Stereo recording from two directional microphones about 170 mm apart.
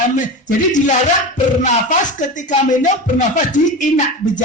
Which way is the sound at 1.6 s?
45° left (ahead or behind).